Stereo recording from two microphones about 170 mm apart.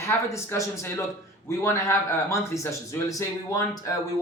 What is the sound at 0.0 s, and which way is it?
A man's voice, 15° left (ahead or behind).